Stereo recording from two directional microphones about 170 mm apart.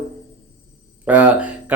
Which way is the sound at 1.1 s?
10° right (ahead or behind).